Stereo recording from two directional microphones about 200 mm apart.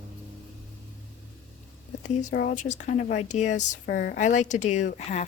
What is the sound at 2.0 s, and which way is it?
Speech, 40° left (ahead or behind).